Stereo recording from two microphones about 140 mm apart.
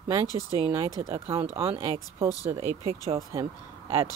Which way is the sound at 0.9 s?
20° right (ahead or behind).